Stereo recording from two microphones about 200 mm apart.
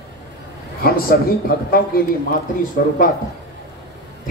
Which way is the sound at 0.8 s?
50° left (ahead or behind).